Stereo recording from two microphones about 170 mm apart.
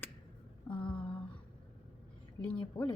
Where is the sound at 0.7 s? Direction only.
30° left (ahead or behind).